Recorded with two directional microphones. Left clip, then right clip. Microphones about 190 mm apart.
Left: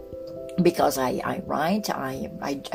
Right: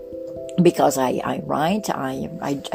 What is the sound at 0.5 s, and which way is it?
Speech, 40° right (ahead or behind).